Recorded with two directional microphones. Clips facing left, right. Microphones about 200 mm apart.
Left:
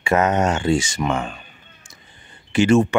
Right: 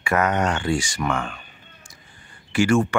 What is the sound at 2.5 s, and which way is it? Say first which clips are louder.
Speech: left 3 dB; 20° left (ahead or behind).